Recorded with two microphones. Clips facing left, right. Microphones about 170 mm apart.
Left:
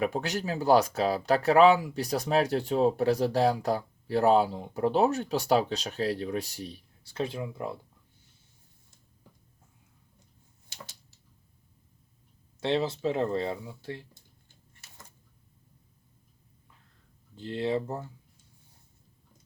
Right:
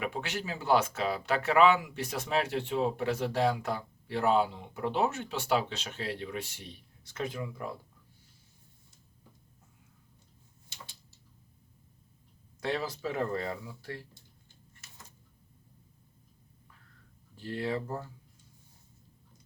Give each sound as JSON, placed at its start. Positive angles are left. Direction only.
{"t": 0.0, "sound": "speech", "side_deg": 40}
{"t": 12.5, "sound": "speech", "side_deg": 25}
{"t": 17.3, "sound": "speech", "side_deg": 20}